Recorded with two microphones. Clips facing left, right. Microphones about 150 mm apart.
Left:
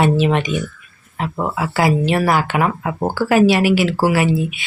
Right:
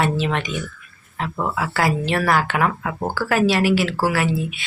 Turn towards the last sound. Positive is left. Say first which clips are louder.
# left 4 dB
turn(degrees=15)  # may be behind; listen again after turning